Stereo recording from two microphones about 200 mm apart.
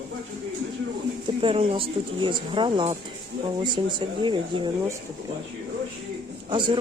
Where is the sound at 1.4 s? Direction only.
25° right (ahead or behind).